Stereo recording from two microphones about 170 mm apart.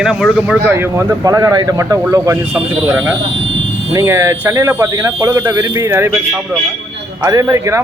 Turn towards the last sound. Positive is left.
turn(degrees=-15)  # may be behind; listen again after turning